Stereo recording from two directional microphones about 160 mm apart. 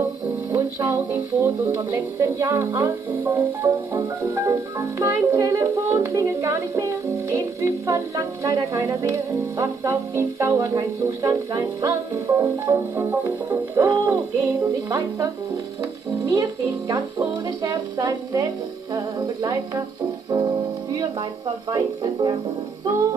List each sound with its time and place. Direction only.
0.5 s speech: 15° right (ahead or behind)
20.2 s music: 25° right (ahead or behind)
21.6 s speech: 30° right (ahead or behind)